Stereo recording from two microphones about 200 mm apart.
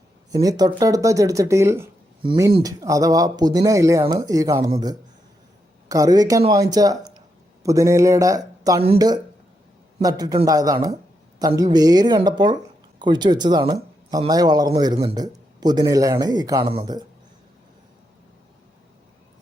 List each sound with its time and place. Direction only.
0.3 s speech: 20° right (ahead or behind)
2.2 s speech: 25° right (ahead or behind)
10.0 s speech: 20° right (ahead or behind)